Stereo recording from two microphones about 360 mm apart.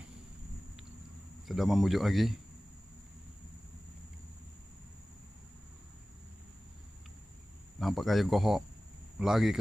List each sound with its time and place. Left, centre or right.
1.5 s speech: centre
7.8 s speech: centre